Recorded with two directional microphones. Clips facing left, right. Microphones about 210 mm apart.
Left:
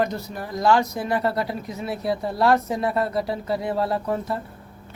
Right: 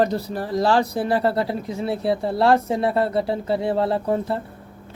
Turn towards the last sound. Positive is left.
turn(degrees=-30)  # may be behind; listen again after turning